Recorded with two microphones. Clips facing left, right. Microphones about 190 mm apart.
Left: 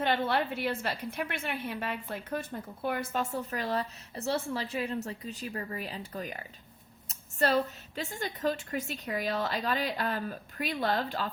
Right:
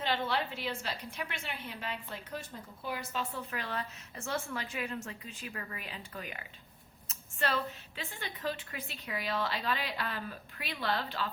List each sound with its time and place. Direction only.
0.0 s a woman's voice: 55° left (ahead or behind)